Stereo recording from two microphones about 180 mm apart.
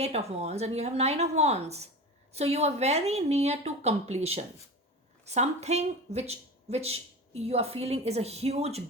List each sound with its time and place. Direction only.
0.0 s speech: 35° right (ahead or behind)